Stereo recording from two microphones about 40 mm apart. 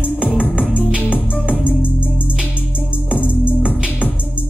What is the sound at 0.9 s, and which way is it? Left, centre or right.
Music, right.